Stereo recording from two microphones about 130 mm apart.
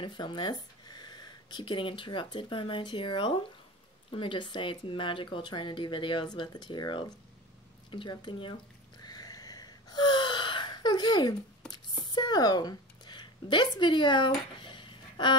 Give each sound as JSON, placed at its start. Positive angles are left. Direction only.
{"t": 0.0, "sound": "speech", "side_deg": 35}
{"t": 9.0, "sound": "wheeze", "side_deg": 30}
{"t": 11.7, "sound": "a sound", "side_deg": 35}